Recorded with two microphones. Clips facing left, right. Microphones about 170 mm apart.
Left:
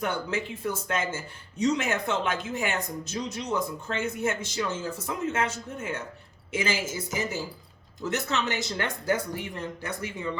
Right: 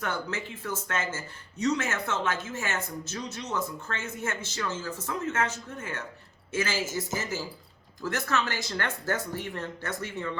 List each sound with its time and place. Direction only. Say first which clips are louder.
0.0 s a woman's voice: left 3 dB; 15° left (ahead or behind)